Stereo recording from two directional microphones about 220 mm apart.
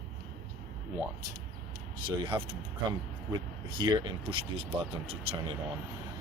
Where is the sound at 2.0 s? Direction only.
20° right (ahead or behind).